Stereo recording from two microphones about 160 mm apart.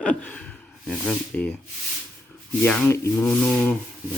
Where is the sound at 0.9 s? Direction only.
Centre (ahead or behind).